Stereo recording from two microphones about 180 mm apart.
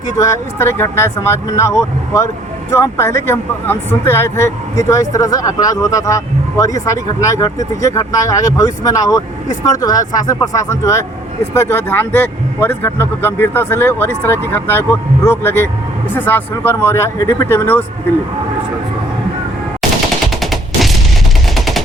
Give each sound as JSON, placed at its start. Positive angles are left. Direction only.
{"t": 0.2, "sound": "speech", "side_deg": 15}
{"t": 20.4, "sound": "gunshot", "side_deg": 0}